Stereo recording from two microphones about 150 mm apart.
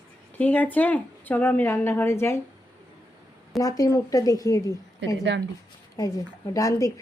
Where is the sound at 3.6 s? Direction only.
25° left (ahead or behind).